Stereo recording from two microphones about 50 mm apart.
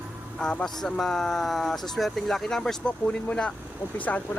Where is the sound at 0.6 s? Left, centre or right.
Centre.